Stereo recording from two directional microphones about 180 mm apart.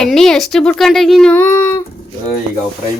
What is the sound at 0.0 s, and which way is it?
Speech, centre (ahead or behind).